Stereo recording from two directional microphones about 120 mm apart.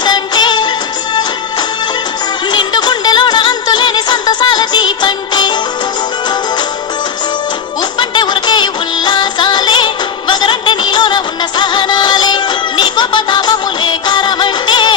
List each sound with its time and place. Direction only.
0.0 s music: 40° left (ahead or behind)
2.5 s music: 40° left (ahead or behind)
7.9 s music: 40° left (ahead or behind)